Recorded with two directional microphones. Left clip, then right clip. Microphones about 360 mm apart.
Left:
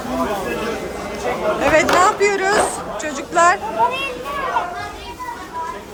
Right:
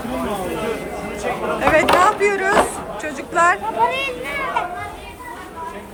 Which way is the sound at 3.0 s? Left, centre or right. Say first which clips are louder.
Left 2 dB; centre.